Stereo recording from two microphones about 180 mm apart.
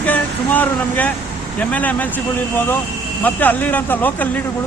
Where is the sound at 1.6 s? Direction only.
10° left (ahead or behind).